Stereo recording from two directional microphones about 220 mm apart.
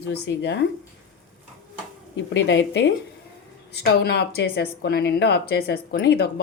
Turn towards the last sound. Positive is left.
turn(degrees=45)  # may be behind; listen again after turning